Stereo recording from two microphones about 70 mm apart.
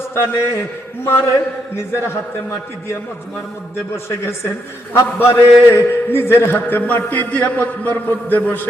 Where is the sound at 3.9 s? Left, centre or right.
Left.